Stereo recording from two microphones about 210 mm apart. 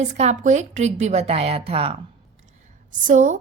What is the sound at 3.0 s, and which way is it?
Speech, 35° right (ahead or behind).